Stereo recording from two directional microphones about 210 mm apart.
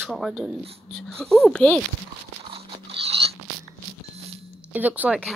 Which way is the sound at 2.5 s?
30° right (ahead or behind).